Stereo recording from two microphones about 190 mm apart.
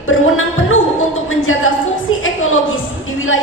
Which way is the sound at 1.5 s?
90° left.